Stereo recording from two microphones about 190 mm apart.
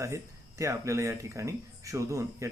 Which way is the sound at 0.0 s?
15° right (ahead or behind).